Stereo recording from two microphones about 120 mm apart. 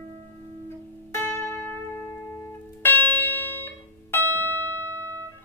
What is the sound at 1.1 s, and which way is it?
Music, 20° left (ahead or behind).